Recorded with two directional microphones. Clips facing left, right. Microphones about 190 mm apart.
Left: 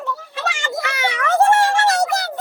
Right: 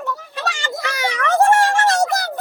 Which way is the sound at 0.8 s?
35° right (ahead or behind).